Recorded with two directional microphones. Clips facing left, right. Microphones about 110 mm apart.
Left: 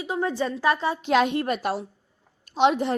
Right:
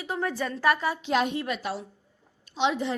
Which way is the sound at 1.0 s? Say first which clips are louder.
Left 5 dB; 80° left.